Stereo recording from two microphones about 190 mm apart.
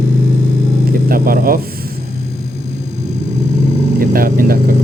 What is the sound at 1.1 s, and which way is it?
Speech, 50° right (ahead or behind).